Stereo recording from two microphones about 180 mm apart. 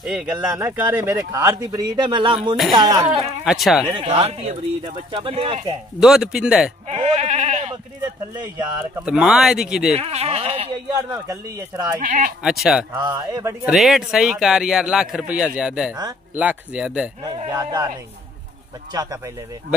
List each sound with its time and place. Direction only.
0.0 s speech: 5° right (ahead or behind); by 3.1 s 25° right (ahead or behind)
3.4 s speech: centre (ahead or behind)
3.8 s speech: 30° right (ahead or behind)
5.9 s speech: 5° right (ahead or behind)
6.9 s goat: 35° right (ahead or behind)
8.9 s speech: 5° right (ahead or behind)
9.9 s speech: 35° right (ahead or behind)
11.0 s speech: 20° right (ahead or behind)
12.0 s speech: 45° right (ahead or behind)
12.4 s speech: 5° right (ahead or behind)
13.0 s speech: 20° right (ahead or behind)
13.7 s speech: centre (ahead or behind)
17.5 s speech: 20° right (ahead or behind)